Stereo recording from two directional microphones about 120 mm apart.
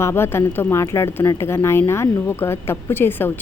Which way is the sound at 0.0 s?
20° left (ahead or behind).